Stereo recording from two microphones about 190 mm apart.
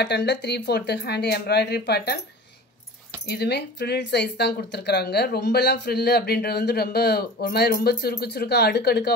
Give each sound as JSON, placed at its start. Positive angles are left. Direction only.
{"t": 0.0, "sound": "speech", "side_deg": 65}
{"t": 3.3, "sound": "speech", "side_deg": 60}